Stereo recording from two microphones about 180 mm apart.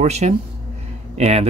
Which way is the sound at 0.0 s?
35° right (ahead or behind).